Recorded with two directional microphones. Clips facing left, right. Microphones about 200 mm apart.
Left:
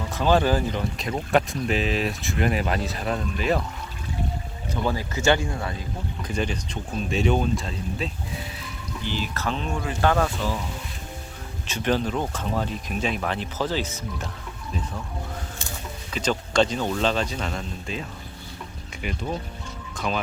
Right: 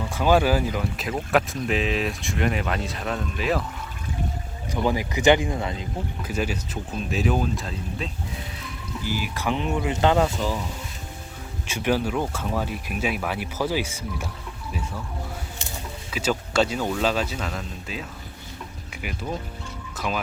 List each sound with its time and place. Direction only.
0.1 s speech: 10° right (ahead or behind)
4.7 s speech: 15° right (ahead or behind)
6.2 s speech: 5° right (ahead or behind)
11.7 s speech: 10° right (ahead or behind)
16.1 s speech: 5° right (ahead or behind)
19.0 s speech: 5° right (ahead or behind)